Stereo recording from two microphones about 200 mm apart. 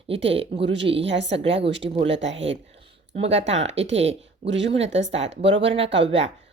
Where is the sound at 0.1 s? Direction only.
65° right (ahead or behind).